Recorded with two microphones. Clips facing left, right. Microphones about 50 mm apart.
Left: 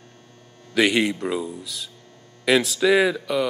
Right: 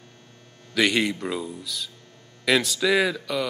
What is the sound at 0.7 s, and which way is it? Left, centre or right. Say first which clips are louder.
Speech: left 3 dB; centre.